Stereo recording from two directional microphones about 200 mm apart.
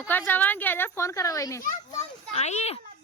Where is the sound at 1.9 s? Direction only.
35° left (ahead or behind).